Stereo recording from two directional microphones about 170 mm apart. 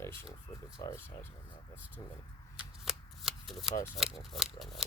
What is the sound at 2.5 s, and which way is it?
Shuffling cards, centre (ahead or behind).